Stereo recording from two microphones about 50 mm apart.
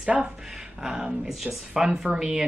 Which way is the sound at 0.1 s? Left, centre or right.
Centre.